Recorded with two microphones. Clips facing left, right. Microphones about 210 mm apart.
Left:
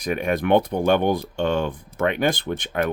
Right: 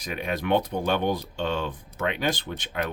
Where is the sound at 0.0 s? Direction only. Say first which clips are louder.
Left 7 dB; 50° left (ahead or behind).